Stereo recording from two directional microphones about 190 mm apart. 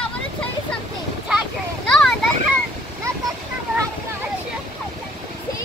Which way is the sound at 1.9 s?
5° left (ahead or behind).